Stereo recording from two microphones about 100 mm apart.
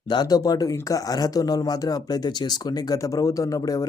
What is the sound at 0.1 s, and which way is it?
Speech, 40° left (ahead or behind).